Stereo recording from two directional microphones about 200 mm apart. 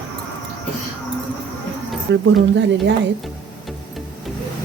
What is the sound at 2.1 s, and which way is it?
Speech, 65° right (ahead or behind).